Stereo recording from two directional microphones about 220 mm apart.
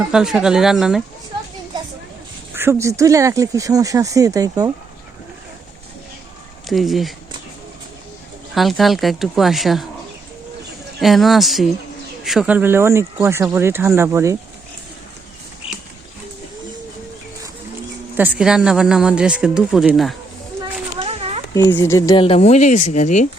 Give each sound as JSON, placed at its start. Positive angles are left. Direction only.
{"t": 0.1, "sound": "speech", "side_deg": -5}
{"t": 2.6, "sound": "speech", "side_deg": -10}
{"t": 6.7, "sound": "speech", "side_deg": 0}
{"t": 8.5, "sound": "speech", "side_deg": 0}
{"t": 11.0, "sound": "speech", "side_deg": 0}
{"t": 18.2, "sound": "speech", "side_deg": -5}
{"t": 21.0, "sound": "a sound", "side_deg": -25}
{"t": 21.5, "sound": "speech", "side_deg": 15}